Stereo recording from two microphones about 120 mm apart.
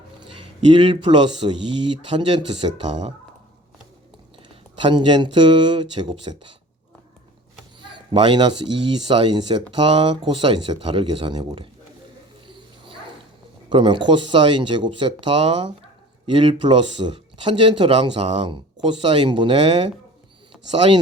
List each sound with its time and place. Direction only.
0.2 s a sound: 45° right (ahead or behind)
1.0 s speech: 40° right (ahead or behind)
4.4 s speech: 40° right (ahead or behind)
7.8 s speech: 40° right (ahead or behind)
12.5 s cat: 45° right (ahead or behind)
13.7 s speech: 45° right (ahead or behind)